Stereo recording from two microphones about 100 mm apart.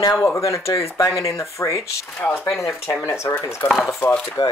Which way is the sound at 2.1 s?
20° left (ahead or behind).